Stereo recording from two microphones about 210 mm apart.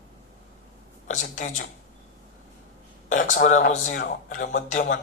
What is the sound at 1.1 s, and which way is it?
Speech, 35° left (ahead or behind).